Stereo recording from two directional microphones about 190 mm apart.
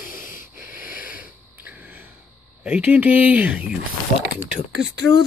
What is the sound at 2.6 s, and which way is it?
Speech, 5° right (ahead or behind).